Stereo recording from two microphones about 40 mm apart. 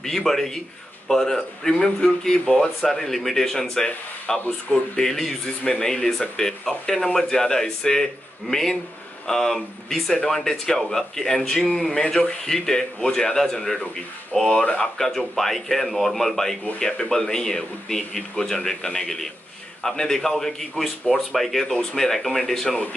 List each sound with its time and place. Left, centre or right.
0.0 s speech: centre
2.9 s speech: centre